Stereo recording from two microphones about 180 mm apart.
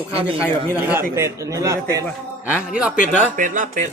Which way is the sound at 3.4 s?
45° right (ahead or behind).